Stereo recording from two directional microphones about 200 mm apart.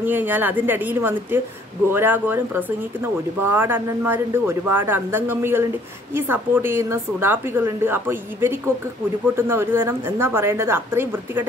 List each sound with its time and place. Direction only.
0.0 s speech: 10° right (ahead or behind)